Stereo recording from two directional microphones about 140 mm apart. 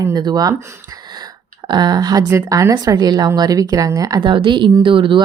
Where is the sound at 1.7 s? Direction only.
30° right (ahead or behind).